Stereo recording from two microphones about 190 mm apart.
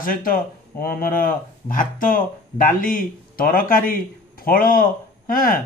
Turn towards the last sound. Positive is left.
turn(degrees=50)  # may be behind; listen again after turning